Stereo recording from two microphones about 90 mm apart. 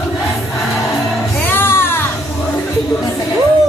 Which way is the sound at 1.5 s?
25° left (ahead or behind).